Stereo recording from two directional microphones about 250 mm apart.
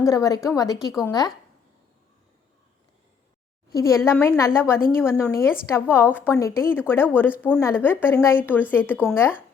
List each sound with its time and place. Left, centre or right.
0.0 s a woman's voice: centre
3.7 s a woman's voice: centre